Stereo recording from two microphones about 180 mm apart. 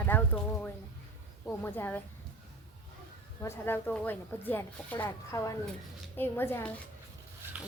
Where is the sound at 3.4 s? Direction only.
15° left (ahead or behind).